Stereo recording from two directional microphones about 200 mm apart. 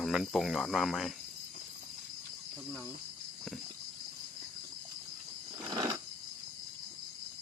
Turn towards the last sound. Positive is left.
turn(degrees=-15)  # may be behind; listen again after turning